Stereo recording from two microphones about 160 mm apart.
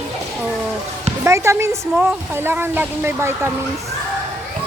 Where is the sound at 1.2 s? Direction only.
15° right (ahead or behind).